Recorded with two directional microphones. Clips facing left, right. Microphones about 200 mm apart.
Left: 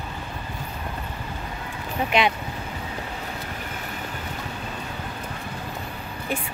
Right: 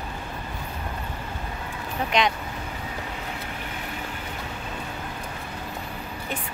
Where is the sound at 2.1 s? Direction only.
5° left (ahead or behind).